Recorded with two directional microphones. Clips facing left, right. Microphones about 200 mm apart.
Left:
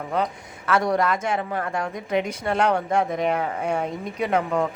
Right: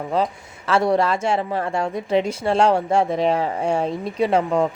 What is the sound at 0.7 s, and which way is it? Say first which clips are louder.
Speech: right 3 dB; 30° right (ahead or behind).